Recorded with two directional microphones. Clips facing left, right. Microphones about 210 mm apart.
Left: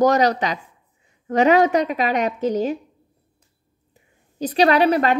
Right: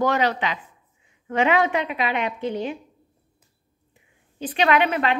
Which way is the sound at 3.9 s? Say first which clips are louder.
Left 3 dB; 40° left (ahead or behind).